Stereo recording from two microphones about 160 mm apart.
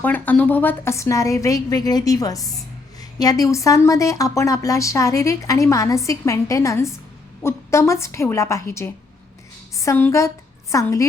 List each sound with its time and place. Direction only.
0.0 s a woman's voice: 10° left (ahead or behind)